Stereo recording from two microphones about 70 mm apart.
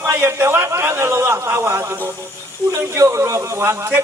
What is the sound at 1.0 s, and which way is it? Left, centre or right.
A man's voice, right.